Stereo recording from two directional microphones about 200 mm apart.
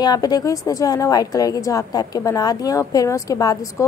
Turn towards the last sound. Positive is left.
turn(degrees=15)  # may be behind; listen again after turning